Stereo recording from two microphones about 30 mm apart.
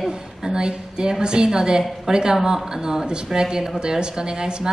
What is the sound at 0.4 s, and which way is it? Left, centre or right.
A woman's voice, right.